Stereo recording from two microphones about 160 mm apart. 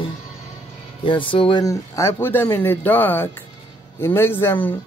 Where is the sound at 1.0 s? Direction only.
30° left (ahead or behind).